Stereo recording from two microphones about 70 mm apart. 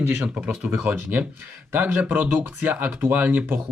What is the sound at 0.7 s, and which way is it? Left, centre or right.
Speech, centre.